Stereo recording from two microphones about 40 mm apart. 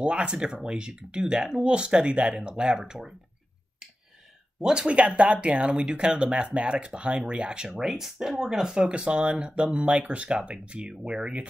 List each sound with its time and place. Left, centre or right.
0.0 s speech: right
4.6 s speech: right
7.8 s speech: centre; by 11.4 s right